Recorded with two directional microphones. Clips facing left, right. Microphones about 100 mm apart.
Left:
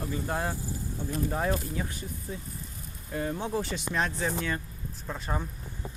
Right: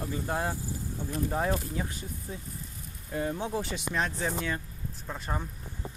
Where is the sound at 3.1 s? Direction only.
20° right (ahead or behind).